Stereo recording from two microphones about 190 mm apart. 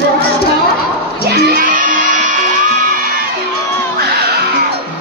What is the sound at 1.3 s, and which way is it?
Crowd, 50° right (ahead or behind).